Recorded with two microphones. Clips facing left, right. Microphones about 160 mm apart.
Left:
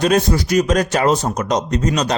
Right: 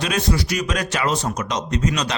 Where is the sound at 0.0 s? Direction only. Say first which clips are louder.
Left 6 dB; 45° left (ahead or behind).